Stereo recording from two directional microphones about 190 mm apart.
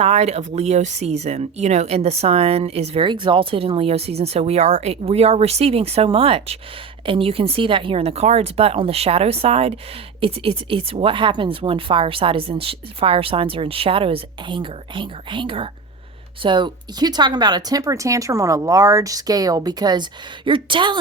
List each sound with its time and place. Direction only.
0.0 s speech: 35° right (ahead or behind)